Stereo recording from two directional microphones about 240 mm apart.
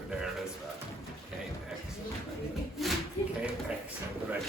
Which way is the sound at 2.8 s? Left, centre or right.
Centre.